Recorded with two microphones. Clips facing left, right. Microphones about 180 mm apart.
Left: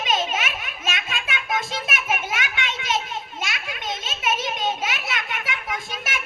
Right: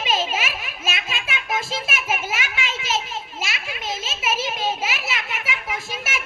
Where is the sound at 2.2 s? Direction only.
5° right (ahead or behind).